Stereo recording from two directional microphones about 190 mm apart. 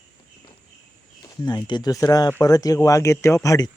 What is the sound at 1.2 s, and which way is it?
Speech, 20° left (ahead or behind).